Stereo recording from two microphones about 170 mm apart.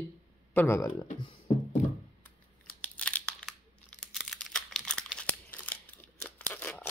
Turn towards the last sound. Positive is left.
turn(degrees=10)  # may be behind; listen again after turning